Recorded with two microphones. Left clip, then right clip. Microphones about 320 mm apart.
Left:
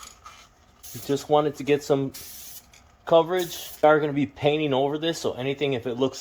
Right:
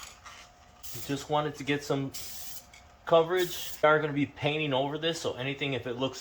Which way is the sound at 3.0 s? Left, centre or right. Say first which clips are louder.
Left 4 dB; left.